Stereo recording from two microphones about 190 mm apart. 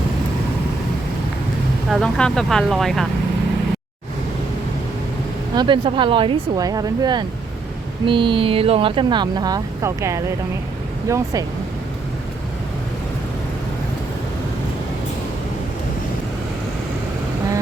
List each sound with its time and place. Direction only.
1.9 s speech: 5° left (ahead or behind)
5.5 s speech: 25° right (ahead or behind)